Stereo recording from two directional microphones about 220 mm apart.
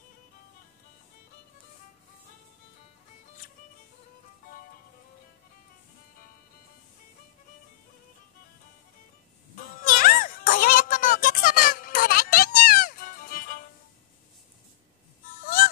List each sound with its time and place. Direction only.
9.6 s music: 40° left (ahead or behind)
15.4 s music: 40° left (ahead or behind)